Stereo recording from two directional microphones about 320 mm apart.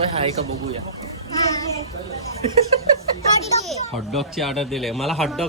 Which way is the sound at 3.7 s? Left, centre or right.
Centre.